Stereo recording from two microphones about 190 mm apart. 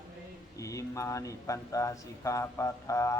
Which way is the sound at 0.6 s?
15° left (ahead or behind).